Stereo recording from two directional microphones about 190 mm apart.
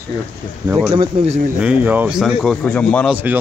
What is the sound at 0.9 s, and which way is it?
Speech, 35° right (ahead or behind).